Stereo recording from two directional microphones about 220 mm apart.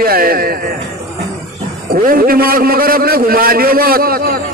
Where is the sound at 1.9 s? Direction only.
40° right (ahead or behind).